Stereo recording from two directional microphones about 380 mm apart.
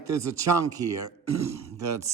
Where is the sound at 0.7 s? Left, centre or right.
Centre.